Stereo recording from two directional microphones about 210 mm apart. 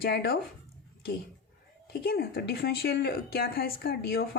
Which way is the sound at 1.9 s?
50° left (ahead or behind).